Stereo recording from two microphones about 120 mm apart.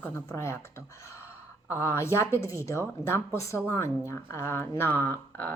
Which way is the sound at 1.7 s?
20° left (ahead or behind).